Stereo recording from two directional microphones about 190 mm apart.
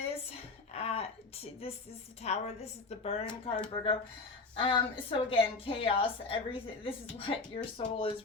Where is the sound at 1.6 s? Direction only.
30° left (ahead or behind).